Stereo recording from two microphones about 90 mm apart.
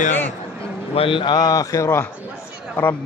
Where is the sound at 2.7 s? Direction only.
25° left (ahead or behind).